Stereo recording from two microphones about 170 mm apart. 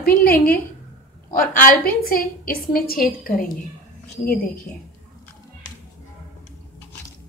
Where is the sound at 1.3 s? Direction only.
55° left (ahead or behind).